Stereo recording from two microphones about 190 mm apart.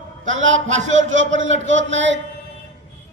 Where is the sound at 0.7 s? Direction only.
40° right (ahead or behind).